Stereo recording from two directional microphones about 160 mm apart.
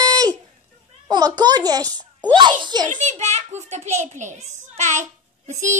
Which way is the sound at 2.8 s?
50° right (ahead or behind).